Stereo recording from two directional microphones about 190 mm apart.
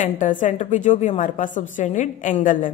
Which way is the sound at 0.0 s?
40° left (ahead or behind).